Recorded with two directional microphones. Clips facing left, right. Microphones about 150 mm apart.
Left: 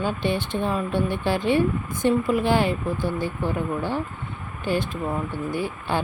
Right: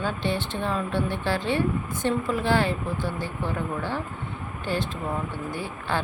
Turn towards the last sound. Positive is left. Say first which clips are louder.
# left 4 dB
turn(degrees=15)  # may be behind; listen again after turning